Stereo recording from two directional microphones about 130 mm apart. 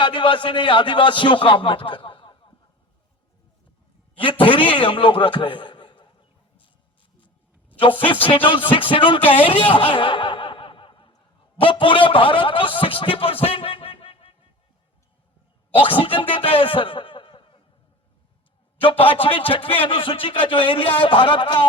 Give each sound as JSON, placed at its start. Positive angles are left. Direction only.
{"t": 0.0, "sound": "a man's voice", "side_deg": 40}
{"t": 4.1, "sound": "a man's voice", "side_deg": 40}
{"t": 7.8, "sound": "speech", "side_deg": 40}
{"t": 9.7, "sound": "snicker", "side_deg": 40}
{"t": 11.6, "sound": "speech", "side_deg": 40}
{"t": 15.7, "sound": "speech", "side_deg": 45}
{"t": 18.8, "sound": "a man's voice", "side_deg": 45}